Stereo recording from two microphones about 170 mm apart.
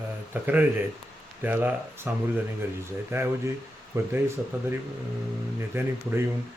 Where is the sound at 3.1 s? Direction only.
15° right (ahead or behind).